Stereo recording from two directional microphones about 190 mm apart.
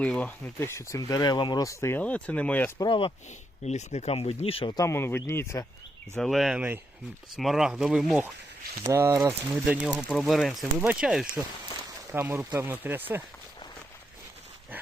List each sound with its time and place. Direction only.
0.0 s speech: 5° left (ahead or behind)
2.8 s speech: 25° left (ahead or behind)
3.6 s speech: 35° left (ahead or behind); by 5.6 s 15° left (ahead or behind)
6.1 s speech: centre (ahead or behind)